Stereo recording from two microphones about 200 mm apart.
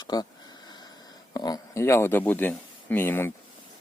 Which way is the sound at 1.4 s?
20° left (ahead or behind).